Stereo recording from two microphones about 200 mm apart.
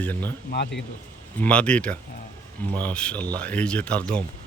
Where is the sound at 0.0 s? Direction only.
10° left (ahead or behind).